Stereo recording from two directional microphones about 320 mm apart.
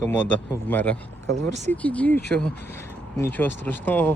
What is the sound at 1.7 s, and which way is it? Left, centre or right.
Speech, centre.